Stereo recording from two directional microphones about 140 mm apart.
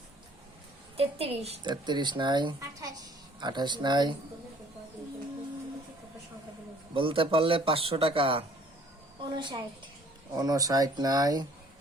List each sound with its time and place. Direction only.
0.9 s a woman's voice: 45° right (ahead or behind)
1.6 s a man's voice: 30° right (ahead or behind)
6.9 s a man's voice: 40° right (ahead or behind)